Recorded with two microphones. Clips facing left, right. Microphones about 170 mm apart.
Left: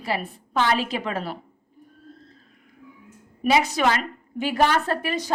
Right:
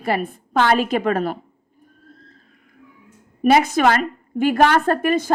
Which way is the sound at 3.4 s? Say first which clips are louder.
Right 5 dB; 50° right (ahead or behind).